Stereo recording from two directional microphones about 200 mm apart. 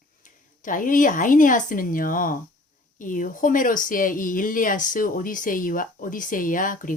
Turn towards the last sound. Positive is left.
turn(degrees=40)  # may be behind; listen again after turning